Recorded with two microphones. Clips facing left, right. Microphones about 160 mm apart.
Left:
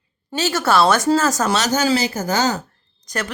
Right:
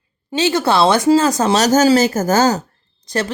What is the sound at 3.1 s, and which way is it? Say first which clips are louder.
Speech: right 6 dB; 30° right (ahead or behind).